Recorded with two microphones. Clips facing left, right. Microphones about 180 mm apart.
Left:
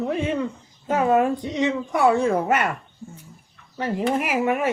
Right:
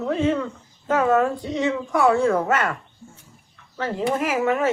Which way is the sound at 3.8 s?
10° left (ahead or behind).